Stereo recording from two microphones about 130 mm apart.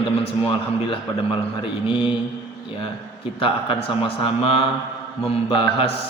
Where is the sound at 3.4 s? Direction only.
45° left (ahead or behind).